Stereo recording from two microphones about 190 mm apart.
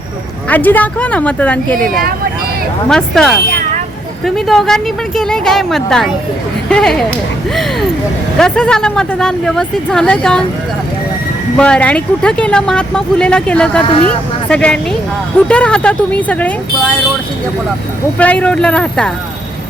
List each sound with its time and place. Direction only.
0.4 s speech: 10° left (ahead or behind)
1.9 s speech: 50° right (ahead or behind)
2.9 s speech: centre (ahead or behind)
4.4 s speech: centre (ahead or behind)
8.4 s speech: 5° left (ahead or behind)
11.5 s speech: 5° left (ahead or behind)
18.2 s speech: 5° left (ahead or behind)